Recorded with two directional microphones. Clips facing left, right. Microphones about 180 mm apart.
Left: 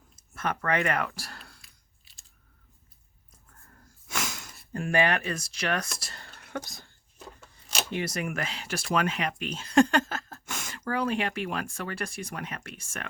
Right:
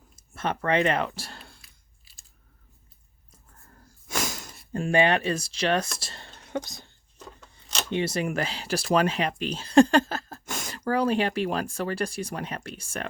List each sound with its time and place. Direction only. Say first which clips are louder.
0.2 s speech: right 2 dB; 30° right (ahead or behind)
1.6 s biting: right 1 dB; centre (ahead or behind)
3.7 s wheeze: right 4 dB; 35° right (ahead or behind)
4.7 s speech: right 4 dB; 25° right (ahead or behind)
6.0 s whispering: right 2 dB; 25° right (ahead or behind)
7.2 s a sound: right 1 dB; 5° left (ahead or behind)
7.9 s speech: right 6 dB; 30° right (ahead or behind)